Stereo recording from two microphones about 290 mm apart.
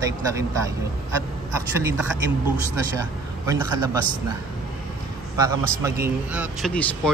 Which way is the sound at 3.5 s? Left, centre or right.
Centre.